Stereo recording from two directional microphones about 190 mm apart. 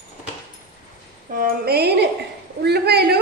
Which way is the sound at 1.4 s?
55° right (ahead or behind).